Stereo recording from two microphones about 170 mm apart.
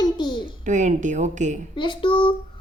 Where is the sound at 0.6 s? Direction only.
45° right (ahead or behind).